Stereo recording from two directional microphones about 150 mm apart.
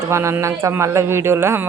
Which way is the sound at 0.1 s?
20° right (ahead or behind).